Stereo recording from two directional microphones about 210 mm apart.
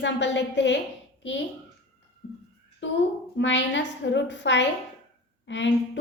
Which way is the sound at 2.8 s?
60° left (ahead or behind).